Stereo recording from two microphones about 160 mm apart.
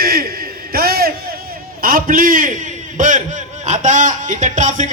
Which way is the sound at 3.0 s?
50° right (ahead or behind).